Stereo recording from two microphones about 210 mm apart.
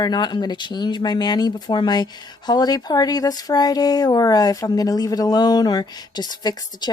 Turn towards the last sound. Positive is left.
turn(degrees=20)  # may be behind; listen again after turning